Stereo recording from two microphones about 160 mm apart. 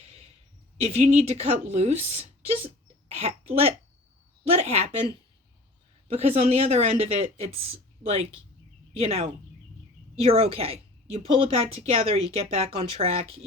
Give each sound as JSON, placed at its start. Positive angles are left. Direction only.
{"t": 0.8, "sound": "speech", "side_deg": -40}
{"t": 6.1, "sound": "speech", "side_deg": -40}